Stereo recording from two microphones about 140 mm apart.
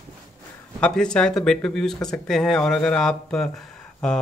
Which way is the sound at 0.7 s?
5° left (ahead or behind).